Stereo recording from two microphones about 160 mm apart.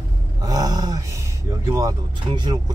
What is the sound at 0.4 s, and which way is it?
Speech, 25° right (ahead or behind).